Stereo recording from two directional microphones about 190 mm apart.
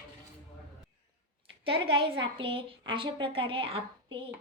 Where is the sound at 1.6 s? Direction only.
25° right (ahead or behind).